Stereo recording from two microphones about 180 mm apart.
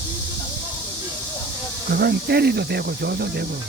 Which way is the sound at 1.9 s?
60° right (ahead or behind).